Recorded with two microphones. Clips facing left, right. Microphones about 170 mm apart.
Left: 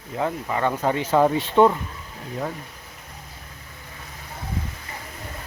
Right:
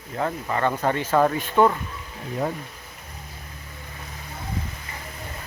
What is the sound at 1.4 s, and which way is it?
Speech, 25° left (ahead or behind).